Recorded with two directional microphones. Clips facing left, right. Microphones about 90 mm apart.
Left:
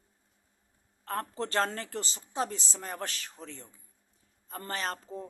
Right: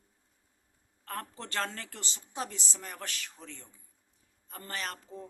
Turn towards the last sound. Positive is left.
turn(degrees=35)  # may be behind; listen again after turning